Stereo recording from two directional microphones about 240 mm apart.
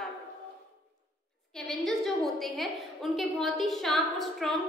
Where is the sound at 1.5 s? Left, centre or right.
Centre.